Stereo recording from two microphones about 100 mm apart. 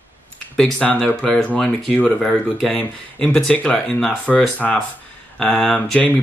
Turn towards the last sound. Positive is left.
turn(degrees=10)  # may be behind; listen again after turning